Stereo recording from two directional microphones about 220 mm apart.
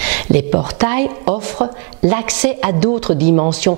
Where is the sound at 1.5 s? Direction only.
30° right (ahead or behind).